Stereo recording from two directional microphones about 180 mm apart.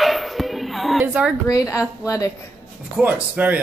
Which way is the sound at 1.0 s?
10° right (ahead or behind).